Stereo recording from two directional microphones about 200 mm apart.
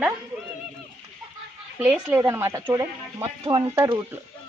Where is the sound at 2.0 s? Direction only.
10° right (ahead or behind).